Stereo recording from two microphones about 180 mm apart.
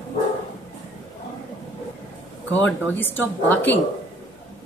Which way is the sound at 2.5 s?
10° left (ahead or behind).